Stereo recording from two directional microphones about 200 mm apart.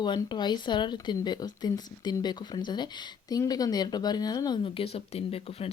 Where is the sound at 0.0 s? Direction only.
20° left (ahead or behind).